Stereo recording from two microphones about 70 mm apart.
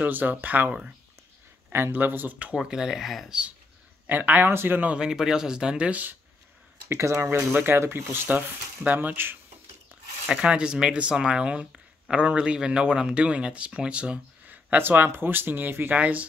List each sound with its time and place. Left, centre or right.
0.0 s speech: right
2.5 s speech: centre
3.3 s speech: centre
4.1 s speech: right
4.9 s speech: centre
6.9 s speech: right
7.2 s speech: right
10.2 s speech: centre